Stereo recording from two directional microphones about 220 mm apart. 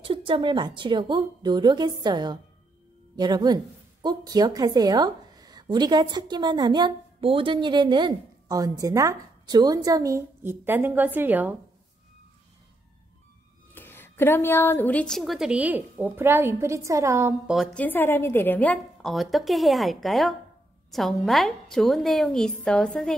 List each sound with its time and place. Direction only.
0.0 s a woman's voice: 25° right (ahead or behind); by 11.5 s 10° right (ahead or behind)
13.7 s a woman's voice: 10° left (ahead or behind); by 17.6 s 10° right (ahead or behind)
17.6 s a woman's voice: 5° left (ahead or behind)